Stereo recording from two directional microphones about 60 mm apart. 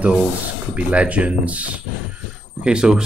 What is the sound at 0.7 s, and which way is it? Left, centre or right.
Speech, right.